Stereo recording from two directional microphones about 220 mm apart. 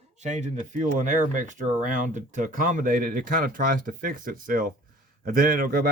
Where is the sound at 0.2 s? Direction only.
30° right (ahead or behind).